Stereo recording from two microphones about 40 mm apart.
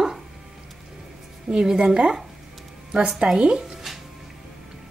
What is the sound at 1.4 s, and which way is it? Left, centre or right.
A woman's voice, right.